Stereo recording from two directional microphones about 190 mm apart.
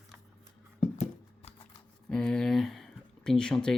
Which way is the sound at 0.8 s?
35° left (ahead or behind).